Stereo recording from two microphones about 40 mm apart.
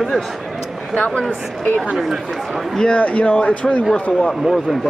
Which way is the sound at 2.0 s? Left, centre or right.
Centre.